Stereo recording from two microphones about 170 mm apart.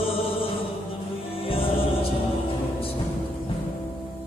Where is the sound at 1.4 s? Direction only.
35° left (ahead or behind).